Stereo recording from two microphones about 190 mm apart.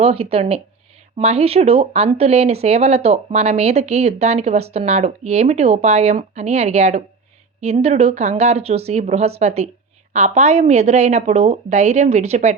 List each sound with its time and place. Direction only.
0.0 s speech: 30° right (ahead or behind)